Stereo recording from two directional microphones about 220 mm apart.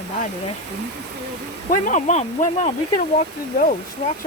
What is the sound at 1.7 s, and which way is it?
Speech, 35° left (ahead or behind).